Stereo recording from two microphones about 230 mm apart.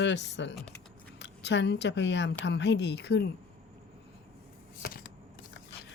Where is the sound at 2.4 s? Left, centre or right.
Left.